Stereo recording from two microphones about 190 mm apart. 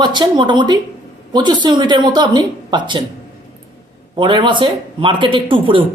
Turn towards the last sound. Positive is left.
turn(degrees=-25)  # may be behind; listen again after turning